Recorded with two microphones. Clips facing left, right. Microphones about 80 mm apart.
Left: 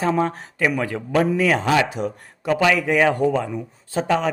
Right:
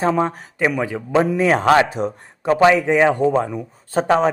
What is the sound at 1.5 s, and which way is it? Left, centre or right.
Speech, right.